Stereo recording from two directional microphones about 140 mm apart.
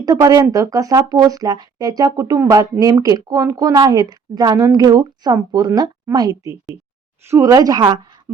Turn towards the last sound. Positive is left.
turn(degrees=-30)  # may be behind; listen again after turning